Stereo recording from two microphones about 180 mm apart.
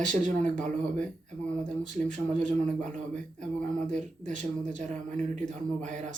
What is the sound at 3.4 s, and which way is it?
Speech, 45° right (ahead or behind).